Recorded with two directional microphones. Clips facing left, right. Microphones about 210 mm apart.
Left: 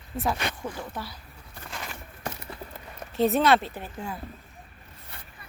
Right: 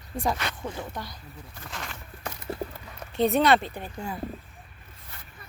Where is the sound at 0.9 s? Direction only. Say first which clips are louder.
Left 1 dB; 5° left (ahead or behind).